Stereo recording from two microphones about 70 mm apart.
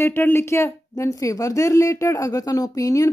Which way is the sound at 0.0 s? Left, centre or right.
Left.